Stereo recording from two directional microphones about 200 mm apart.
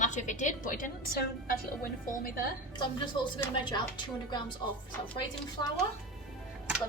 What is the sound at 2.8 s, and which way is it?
Speech, 25° left (ahead or behind).